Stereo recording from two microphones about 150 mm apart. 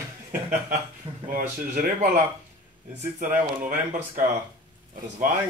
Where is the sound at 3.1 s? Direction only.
55° right (ahead or behind).